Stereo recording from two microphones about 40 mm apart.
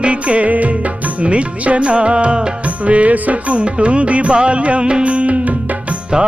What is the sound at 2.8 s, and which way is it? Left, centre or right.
Music, right.